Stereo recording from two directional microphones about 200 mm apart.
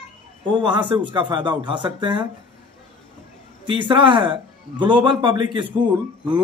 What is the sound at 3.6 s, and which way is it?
A man's voice, 25° right (ahead or behind).